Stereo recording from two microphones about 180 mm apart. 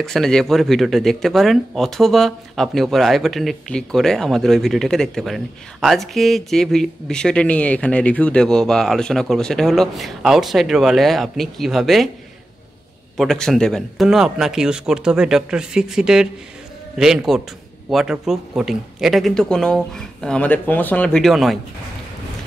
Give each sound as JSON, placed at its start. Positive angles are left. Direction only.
{"t": 0.0, "sound": "speech", "side_deg": 5}
{"t": 13.2, "sound": "speech", "side_deg": 0}